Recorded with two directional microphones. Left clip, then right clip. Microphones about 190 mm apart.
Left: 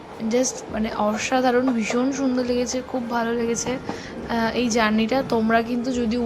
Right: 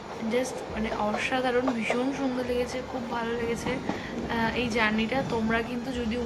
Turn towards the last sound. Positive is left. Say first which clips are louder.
# left 7 dB
turn(degrees=35)  # may be behind; listen again after turning